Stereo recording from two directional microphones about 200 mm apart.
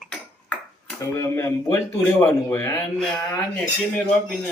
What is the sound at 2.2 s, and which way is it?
Speech, 10° left (ahead or behind).